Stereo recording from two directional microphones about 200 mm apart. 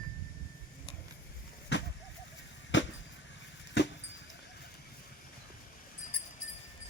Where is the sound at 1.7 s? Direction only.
60° left (ahead or behind).